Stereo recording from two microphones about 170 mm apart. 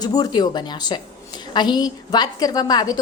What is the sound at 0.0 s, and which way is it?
A woman's voice, 20° left (ahead or behind).